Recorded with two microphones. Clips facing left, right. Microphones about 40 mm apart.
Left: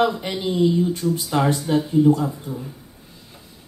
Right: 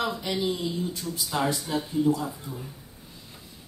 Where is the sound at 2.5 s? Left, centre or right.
Left.